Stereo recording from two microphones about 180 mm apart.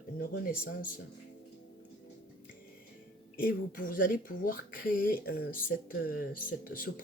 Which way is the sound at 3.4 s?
50° left (ahead or behind).